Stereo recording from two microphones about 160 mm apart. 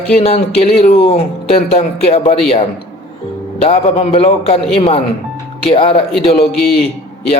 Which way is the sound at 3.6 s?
40° left (ahead or behind).